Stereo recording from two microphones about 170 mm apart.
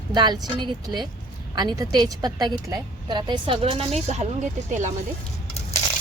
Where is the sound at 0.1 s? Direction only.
25° right (ahead or behind); by 4.9 s 45° right (ahead or behind).